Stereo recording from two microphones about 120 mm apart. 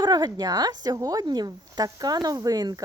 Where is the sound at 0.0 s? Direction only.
35° right (ahead or behind).